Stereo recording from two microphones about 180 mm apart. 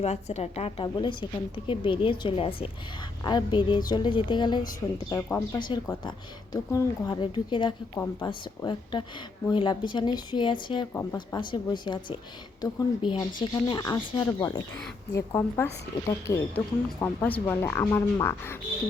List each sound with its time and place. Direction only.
0.0 s a woman's voice: 35° left (ahead or behind)
10.9 s speech: 15° left (ahead or behind)
11.3 s a woman's voice: 25° left (ahead or behind)